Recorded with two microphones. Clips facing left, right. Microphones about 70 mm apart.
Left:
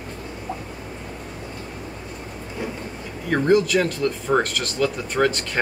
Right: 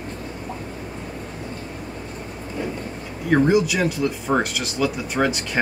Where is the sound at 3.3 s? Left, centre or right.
Centre.